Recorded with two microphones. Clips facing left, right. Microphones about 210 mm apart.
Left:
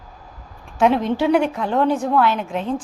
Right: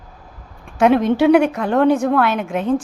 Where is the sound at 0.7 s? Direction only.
60° right (ahead or behind).